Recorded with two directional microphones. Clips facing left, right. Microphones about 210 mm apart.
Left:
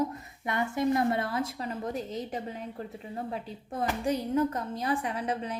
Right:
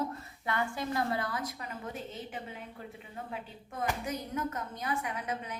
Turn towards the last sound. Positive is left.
turn(degrees=30)  # may be behind; listen again after turning